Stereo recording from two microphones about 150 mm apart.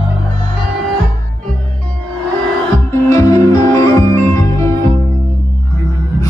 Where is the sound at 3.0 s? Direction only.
20° left (ahead or behind).